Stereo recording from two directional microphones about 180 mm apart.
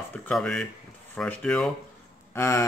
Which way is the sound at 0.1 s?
5° left (ahead or behind).